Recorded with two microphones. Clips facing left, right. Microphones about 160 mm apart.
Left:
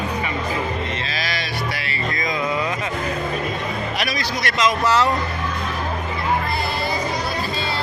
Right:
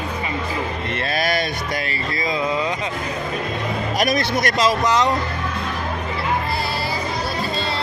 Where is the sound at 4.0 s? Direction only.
45° right (ahead or behind).